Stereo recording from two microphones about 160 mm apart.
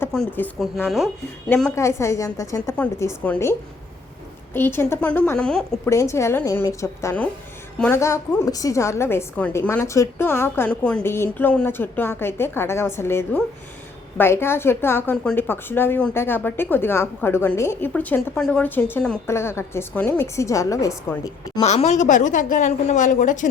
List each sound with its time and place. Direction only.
0.1 s speech: 5° left (ahead or behind)
1.7 s a woman's voice: 20° left (ahead or behind)
4.5 s a woman's voice: 15° left (ahead or behind)
5.9 s a woman's voice: 20° left (ahead or behind)
21.6 s a woman's voice: 45° left (ahead or behind)